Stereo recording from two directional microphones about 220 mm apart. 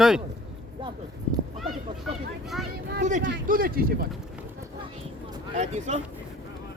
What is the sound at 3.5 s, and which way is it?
Speech, 40° right (ahead or behind).